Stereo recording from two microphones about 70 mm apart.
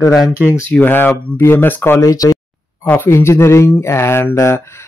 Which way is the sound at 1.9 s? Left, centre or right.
Left.